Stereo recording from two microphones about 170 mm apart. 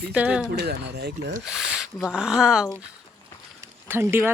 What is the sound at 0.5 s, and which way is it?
Speech, 70° right (ahead or behind).